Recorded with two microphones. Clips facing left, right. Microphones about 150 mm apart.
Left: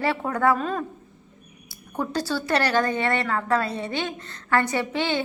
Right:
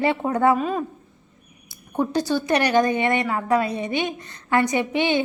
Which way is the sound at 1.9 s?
20° right (ahead or behind).